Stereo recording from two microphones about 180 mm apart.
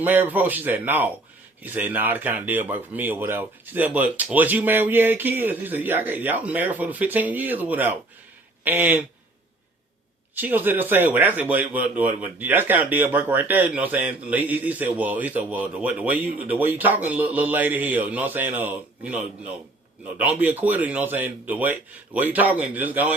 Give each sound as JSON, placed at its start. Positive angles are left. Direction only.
{"t": 0.0, "sound": "speech", "side_deg": -10}
{"t": 10.3, "sound": "speech", "side_deg": -10}